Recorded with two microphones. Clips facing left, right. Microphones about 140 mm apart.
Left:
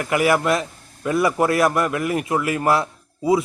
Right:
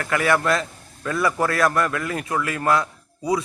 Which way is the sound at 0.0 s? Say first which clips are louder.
Left 2 dB; 20° left (ahead or behind).